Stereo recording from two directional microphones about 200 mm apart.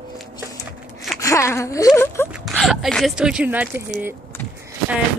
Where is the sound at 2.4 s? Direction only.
Centre (ahead or behind).